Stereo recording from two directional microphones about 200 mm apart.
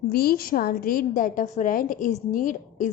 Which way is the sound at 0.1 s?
50° left (ahead or behind).